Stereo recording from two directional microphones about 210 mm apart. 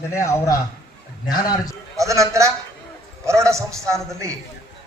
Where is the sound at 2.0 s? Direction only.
15° right (ahead or behind).